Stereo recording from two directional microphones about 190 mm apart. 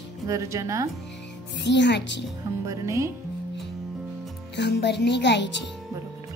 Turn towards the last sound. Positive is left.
turn(degrees=65)  # may be behind; listen again after turning